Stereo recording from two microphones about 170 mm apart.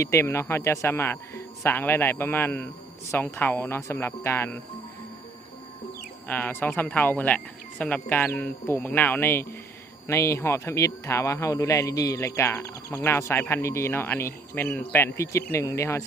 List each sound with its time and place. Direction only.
0.0 s speech: 15° left (ahead or behind)
6.2 s speech: 10° left (ahead or behind)